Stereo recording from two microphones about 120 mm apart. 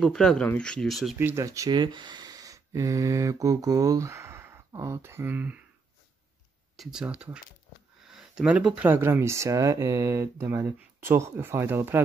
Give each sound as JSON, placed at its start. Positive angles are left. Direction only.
{"t": 0.0, "sound": "speech", "side_deg": 5}
{"t": 1.1, "sound": "speech", "side_deg": -20}
{"t": 1.7, "sound": "speech", "side_deg": -40}
{"t": 6.8, "sound": "speech", "side_deg": -5}